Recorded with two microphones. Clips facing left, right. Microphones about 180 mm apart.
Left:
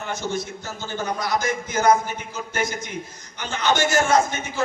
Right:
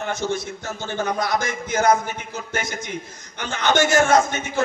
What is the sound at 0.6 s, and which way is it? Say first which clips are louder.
A man's voice: right 3 dB; 55° right (ahead or behind).